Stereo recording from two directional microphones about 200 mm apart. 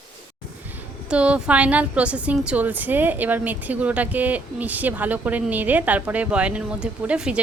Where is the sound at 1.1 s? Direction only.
5° right (ahead or behind).